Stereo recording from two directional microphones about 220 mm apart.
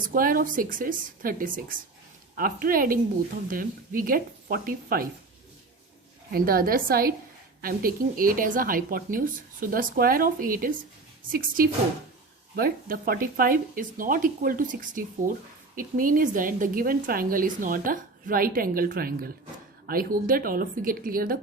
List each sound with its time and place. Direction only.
0.0 s speech: 40° right (ahead or behind)
6.3 s speech: 40° right (ahead or behind)